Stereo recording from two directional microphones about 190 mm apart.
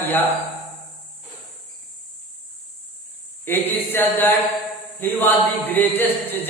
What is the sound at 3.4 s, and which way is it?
Speech, 10° left (ahead or behind).